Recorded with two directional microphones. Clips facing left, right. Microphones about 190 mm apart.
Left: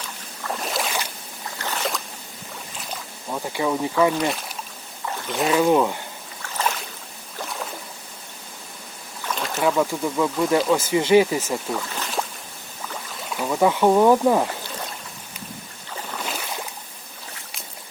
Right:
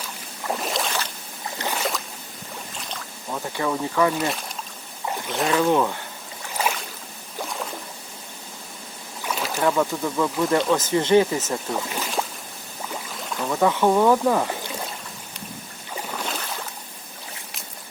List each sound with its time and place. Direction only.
0.0 s boat: 5° right (ahead or behind)
1.5 s boat: 15° right (ahead or behind)
2.9 s speech: 10° left (ahead or behind)
5.5 s speech: 15° left (ahead or behind)
6.4 s boat: 10° right (ahead or behind)
7.4 s boat: centre (ahead or behind)
9.2 s boat: 5° right (ahead or behind)
9.6 s speech: 5° left (ahead or behind)
11.8 s speech: 10° right (ahead or behind)
13.3 s speech: 10° left (ahead or behind)
16.1 s boat: 5° left (ahead or behind)